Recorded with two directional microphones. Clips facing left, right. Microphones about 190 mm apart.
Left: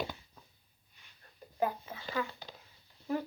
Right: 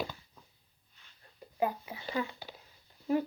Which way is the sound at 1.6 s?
10° right (ahead or behind).